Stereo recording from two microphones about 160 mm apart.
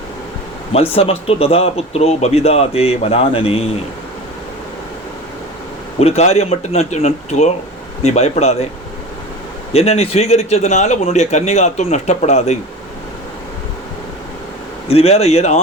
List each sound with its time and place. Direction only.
0.7 s speech: 35° left (ahead or behind)
6.0 s a man's voice: 40° left (ahead or behind)
9.7 s a man's voice: 40° left (ahead or behind)
14.8 s speech: 40° left (ahead or behind)